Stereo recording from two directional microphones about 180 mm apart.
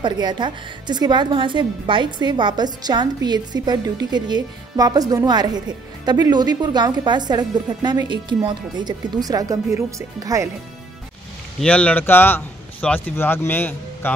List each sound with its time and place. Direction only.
0.0 s a woman's voice: 25° right (ahead or behind)
11.6 s speech: 5° left (ahead or behind)